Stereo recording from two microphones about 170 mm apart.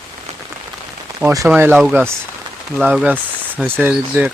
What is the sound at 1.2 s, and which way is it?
Speech, 20° right (ahead or behind).